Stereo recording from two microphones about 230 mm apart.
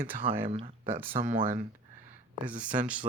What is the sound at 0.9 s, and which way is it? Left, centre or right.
Speech, right.